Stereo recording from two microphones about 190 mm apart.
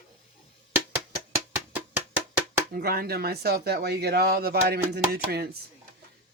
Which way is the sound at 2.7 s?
55° right (ahead or behind).